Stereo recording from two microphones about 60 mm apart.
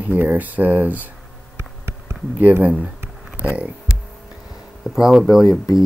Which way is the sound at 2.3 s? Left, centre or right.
Right.